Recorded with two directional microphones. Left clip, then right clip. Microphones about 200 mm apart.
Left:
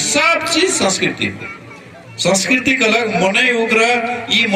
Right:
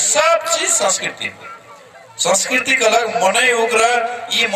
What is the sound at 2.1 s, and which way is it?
Speech, 60° right (ahead or behind).